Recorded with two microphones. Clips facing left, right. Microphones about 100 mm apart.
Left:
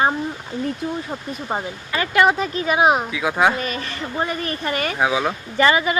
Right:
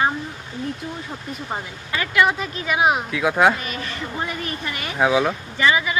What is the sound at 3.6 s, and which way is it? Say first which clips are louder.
Speech: left 2 dB; 35° left (ahead or behind).